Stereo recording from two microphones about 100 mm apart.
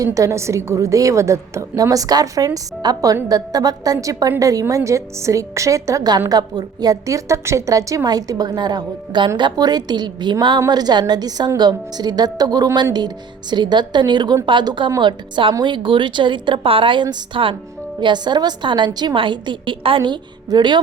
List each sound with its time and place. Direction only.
0.0 s a woman's voice: 35° right (ahead or behind); by 20.7 s 50° right (ahead or behind)